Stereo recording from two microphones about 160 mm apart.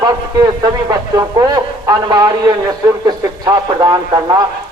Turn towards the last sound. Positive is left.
turn(degrees=-25)  # may be behind; listen again after turning